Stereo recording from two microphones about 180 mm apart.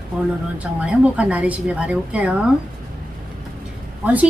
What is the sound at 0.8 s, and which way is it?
A woman's voice, 5° right (ahead or behind).